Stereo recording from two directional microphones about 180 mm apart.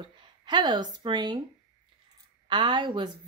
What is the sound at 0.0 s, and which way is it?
Speech, 25° right (ahead or behind).